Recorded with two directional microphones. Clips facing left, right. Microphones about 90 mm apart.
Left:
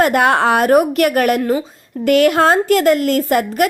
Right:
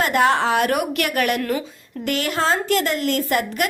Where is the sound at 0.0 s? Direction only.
50° left (ahead or behind).